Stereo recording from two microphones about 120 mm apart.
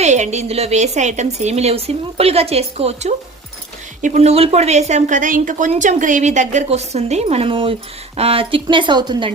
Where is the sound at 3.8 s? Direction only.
90° right; by 9.3 s 40° right (ahead or behind).